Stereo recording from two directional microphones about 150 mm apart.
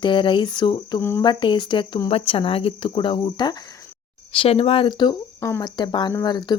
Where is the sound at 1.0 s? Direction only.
15° left (ahead or behind).